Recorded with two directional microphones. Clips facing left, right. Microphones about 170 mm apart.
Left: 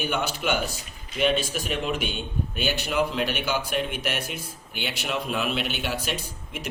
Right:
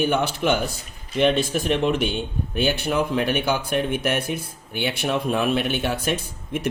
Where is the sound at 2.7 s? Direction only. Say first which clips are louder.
Right 3 dB; 55° right (ahead or behind).